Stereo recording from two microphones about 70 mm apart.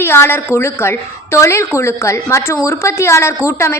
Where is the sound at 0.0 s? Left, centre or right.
Left.